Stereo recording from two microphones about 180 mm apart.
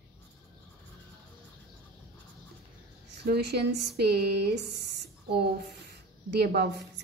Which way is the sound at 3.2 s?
65° right (ahead or behind).